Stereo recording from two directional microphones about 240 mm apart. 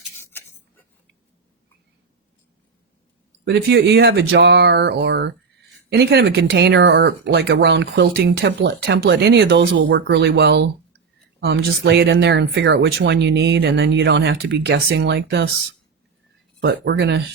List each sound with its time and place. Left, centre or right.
3.4 s speech: right
16.6 s speech: right